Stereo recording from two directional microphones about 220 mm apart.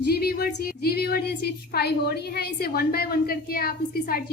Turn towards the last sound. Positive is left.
turn(degrees=45)  # may be behind; listen again after turning